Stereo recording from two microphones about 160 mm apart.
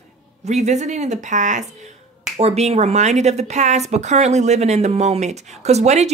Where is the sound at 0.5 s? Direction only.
45° right (ahead or behind).